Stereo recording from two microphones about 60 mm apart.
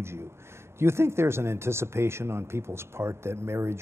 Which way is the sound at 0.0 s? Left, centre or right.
Right.